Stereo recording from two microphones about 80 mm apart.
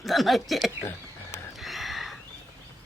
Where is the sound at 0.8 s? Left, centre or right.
Left.